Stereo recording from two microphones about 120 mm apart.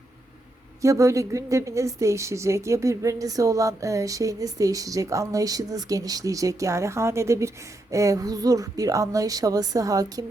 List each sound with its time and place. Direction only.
0.8 s a woman's voice: 25° right (ahead or behind)